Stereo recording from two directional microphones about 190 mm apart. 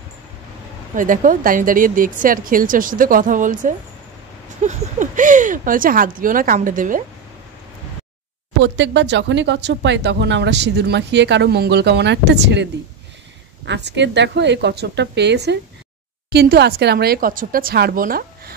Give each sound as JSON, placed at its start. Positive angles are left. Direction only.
{"t": 0.9, "sound": "speech", "side_deg": -45}
{"t": 8.5, "sound": "speech", "side_deg": -70}
{"t": 13.7, "sound": "speech", "side_deg": -65}